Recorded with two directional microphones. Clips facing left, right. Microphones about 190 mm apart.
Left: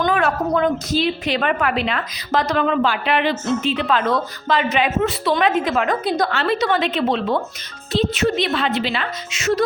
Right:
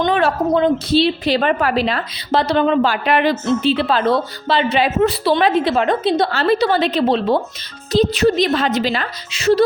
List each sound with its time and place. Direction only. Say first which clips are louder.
0.0 s a woman's voice: right 3 dB; 30° right (ahead or behind)